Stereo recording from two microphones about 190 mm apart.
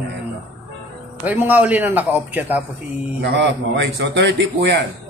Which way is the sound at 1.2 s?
10° right (ahead or behind).